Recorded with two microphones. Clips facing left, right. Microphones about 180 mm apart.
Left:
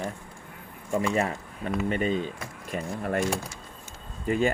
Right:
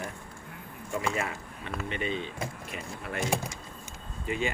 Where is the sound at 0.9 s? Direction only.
40° left (ahead or behind).